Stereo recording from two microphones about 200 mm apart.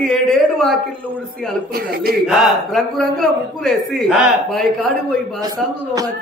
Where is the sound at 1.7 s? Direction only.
50° right (ahead or behind).